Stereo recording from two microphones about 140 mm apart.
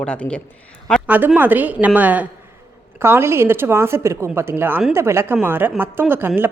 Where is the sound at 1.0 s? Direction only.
10° right (ahead or behind).